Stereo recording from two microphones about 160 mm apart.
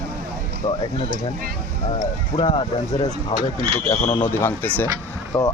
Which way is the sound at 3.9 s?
25° left (ahead or behind).